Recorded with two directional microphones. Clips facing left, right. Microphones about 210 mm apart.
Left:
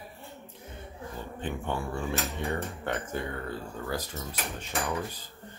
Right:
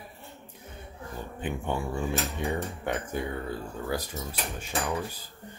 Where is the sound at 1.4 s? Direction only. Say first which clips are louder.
Right 2 dB; 15° right (ahead or behind).